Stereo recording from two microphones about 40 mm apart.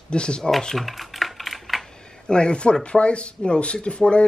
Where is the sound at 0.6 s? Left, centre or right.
Centre.